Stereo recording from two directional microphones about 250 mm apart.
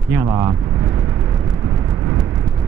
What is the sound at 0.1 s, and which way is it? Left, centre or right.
Speech, centre.